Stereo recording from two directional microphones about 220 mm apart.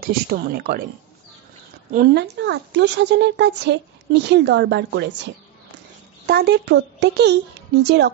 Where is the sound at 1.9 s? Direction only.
45° right (ahead or behind).